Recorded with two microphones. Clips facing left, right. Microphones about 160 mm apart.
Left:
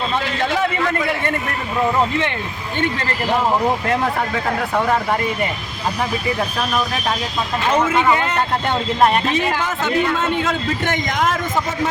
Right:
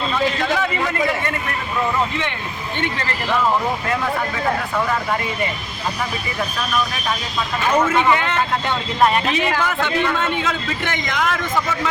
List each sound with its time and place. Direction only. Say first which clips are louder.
10.4 s a man's voice: left 3 dB; 45° left (ahead or behind)